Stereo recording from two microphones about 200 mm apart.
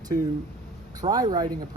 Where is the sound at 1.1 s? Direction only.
20° right (ahead or behind).